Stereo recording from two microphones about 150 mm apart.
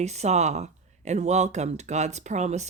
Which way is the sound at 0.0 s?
50° right (ahead or behind).